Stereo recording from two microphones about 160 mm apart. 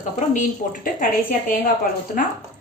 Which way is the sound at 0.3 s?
55° left (ahead or behind).